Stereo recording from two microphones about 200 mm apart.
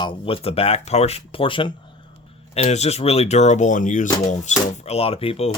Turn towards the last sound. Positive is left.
turn(degrees=30)  # may be behind; listen again after turning